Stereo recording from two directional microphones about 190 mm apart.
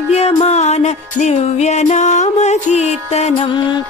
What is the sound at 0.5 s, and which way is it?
Music, 35° left (ahead or behind).